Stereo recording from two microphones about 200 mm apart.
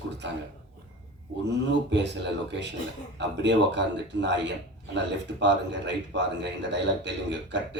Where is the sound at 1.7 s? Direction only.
60° right (ahead or behind).